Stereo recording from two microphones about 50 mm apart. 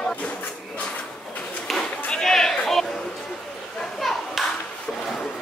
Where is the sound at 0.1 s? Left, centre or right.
Left.